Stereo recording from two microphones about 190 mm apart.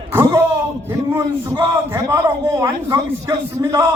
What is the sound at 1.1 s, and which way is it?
A man's voice, 10° right (ahead or behind).